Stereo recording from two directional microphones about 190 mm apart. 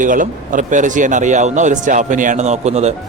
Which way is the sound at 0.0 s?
45° right (ahead or behind).